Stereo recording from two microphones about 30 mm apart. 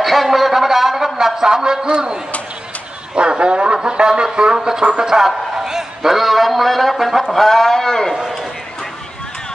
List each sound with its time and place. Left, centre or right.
0.0 s a sound: centre
1.2 s a man's voice: centre
3.2 s speech: right
3.7 s a sound: right
6.1 s a man's voice: centre
7.3 s speech: centre